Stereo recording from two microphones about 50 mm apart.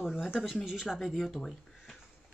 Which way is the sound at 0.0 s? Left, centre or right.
Centre.